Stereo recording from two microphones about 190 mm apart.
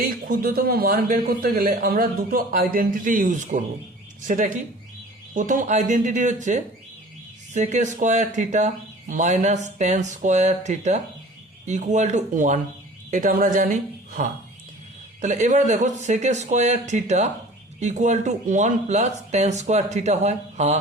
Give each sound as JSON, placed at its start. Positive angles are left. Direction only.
{"t": 0.3, "sound": "a man's voice", "side_deg": -50}